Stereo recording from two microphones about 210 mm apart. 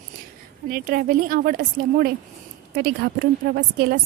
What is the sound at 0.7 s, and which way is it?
Speech, 45° right (ahead or behind).